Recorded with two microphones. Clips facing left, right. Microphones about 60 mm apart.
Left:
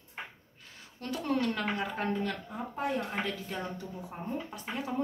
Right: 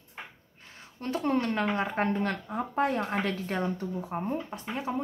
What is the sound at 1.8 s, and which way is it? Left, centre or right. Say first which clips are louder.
A woman's voice: right 4 dB; right.